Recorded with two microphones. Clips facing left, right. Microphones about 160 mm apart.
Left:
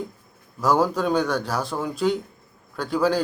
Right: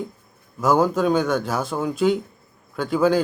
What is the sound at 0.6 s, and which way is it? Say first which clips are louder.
A man's voice: right 2 dB; centre (ahead or behind).